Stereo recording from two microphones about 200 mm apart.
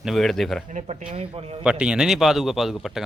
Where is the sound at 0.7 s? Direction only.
35° right (ahead or behind).